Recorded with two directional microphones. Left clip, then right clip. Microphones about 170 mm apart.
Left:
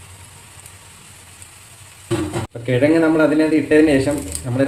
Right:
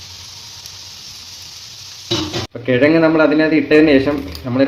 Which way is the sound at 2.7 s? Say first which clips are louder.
Right 3 dB; 35° right (ahead or behind).